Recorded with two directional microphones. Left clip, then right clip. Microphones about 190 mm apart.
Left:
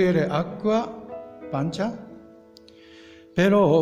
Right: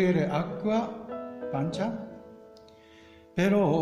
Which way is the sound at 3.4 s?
40° left (ahead or behind).